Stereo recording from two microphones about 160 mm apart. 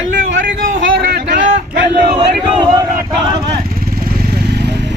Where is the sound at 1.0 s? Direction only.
75° right (ahead or behind).